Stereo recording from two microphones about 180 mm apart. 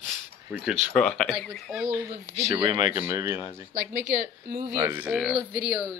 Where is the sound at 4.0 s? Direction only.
45° right (ahead or behind).